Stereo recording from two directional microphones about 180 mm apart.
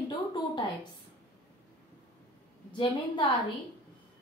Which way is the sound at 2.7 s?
25° left (ahead or behind).